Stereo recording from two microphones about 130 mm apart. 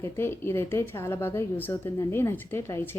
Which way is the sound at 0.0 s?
20° left (ahead or behind).